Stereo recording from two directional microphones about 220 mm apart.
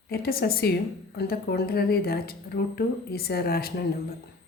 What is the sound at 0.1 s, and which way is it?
A woman's voice, 45° left (ahead or behind).